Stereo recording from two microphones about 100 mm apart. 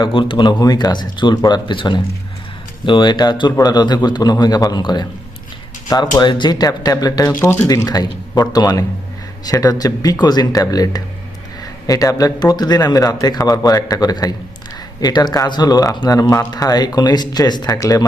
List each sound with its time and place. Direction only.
0.0 s a man's voice: 60° left (ahead or behind); by 7.3 s 40° left (ahead or behind)
7.3 s speech: 20° left (ahead or behind)
7.9 s a man's voice: 40° left (ahead or behind)